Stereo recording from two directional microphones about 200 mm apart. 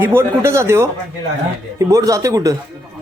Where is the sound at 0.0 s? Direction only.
10° right (ahead or behind).